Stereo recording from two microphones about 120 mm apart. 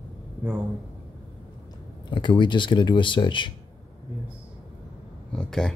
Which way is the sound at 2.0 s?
40° left (ahead or behind).